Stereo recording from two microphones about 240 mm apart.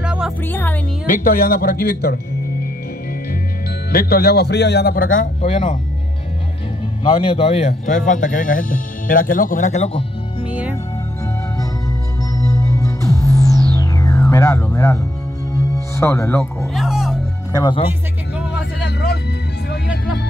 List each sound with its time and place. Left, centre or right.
0.0 s music: centre
0.5 s music: centre
1.0 s speech: left
3.9 s speech: left
7.0 s speech: left
10.4 s music: centre
12.4 s music: centre
16.7 s music: centre
17.5 s speech: centre
18.8 s a sound: left